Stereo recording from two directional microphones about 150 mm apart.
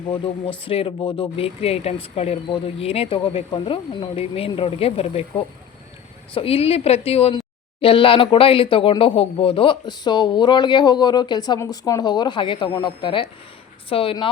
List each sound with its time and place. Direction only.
0.6 s speech: 40° left (ahead or behind)
6.3 s speech: 40° left (ahead or behind)